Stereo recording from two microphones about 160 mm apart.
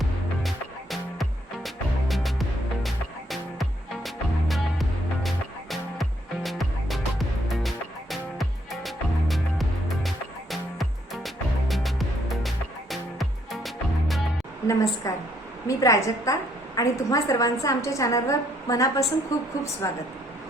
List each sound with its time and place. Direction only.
0.0 s music: centre (ahead or behind)
14.7 s a woman's voice: 20° left (ahead or behind)